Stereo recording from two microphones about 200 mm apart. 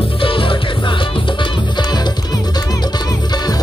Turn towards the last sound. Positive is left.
turn(degrees=20)  # may be behind; listen again after turning